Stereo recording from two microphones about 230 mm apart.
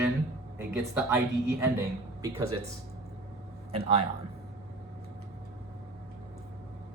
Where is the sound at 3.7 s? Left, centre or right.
Right.